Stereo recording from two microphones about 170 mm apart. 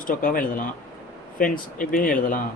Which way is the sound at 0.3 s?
55° left (ahead or behind).